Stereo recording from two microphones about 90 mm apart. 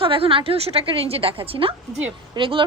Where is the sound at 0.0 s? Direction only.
80° right.